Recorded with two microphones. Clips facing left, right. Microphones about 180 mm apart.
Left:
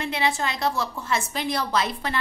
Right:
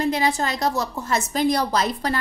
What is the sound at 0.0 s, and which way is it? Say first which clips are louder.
A woman's voice: right 4 dB; 40° right (ahead or behind).